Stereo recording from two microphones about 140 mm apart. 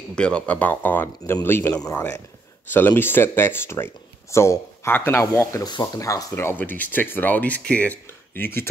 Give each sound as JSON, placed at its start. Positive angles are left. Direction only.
{"t": 0.1, "sound": "speech", "side_deg": 10}
{"t": 1.7, "sound": "speech", "side_deg": 25}
{"t": 2.7, "sound": "speech", "side_deg": 15}